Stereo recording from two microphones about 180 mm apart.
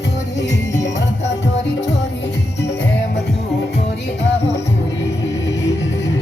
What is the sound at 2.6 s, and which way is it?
Music, 75° left (ahead or behind).